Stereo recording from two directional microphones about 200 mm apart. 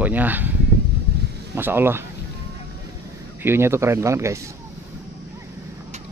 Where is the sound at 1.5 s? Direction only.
10° right (ahead or behind).